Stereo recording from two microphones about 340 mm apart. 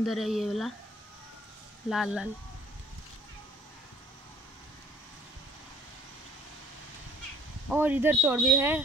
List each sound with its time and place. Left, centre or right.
0.0 s speech: centre
1.9 s speech: centre
7.7 s speech: centre